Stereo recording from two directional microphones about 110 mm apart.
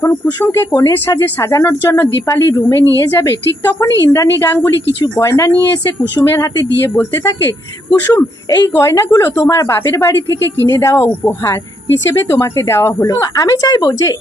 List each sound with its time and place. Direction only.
0.3 s a woman's voice: 20° left (ahead or behind)
8.1 s a woman's voice: 35° left (ahead or behind)